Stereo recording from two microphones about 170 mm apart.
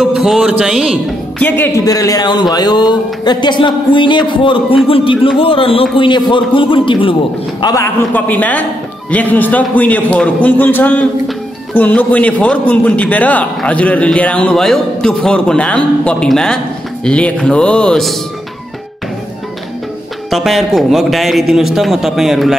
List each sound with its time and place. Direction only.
0.0 s speech: centre (ahead or behind)
1.9 s a man's voice: 20° left (ahead or behind)
7.6 s a man's voice: 15° left (ahead or behind)
20.2 s a man's voice: centre (ahead or behind)